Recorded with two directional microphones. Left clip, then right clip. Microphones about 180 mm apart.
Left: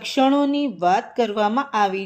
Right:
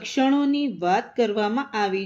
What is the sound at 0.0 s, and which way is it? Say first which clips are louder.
A woman's voice: left 4 dB; 30° left (ahead or behind).